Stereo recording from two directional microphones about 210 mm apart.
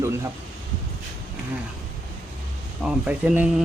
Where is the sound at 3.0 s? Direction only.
5° right (ahead or behind).